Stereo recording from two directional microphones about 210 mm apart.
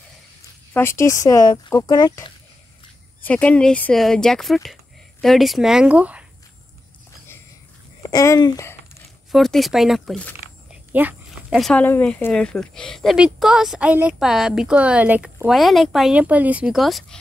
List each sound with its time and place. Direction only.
0.7 s speech: 10° left (ahead or behind)
3.3 s speech: 5° left (ahead or behind)
8.0 s speech: 15° left (ahead or behind)
9.3 s speech: centre (ahead or behind)
10.9 s speech: 10° right (ahead or behind)